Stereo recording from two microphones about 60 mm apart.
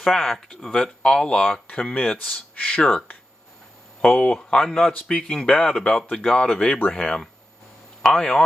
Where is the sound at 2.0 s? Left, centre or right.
Left.